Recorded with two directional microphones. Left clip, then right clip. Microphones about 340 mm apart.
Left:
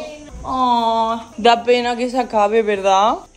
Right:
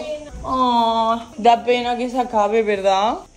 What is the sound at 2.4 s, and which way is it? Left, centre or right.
Speech, left.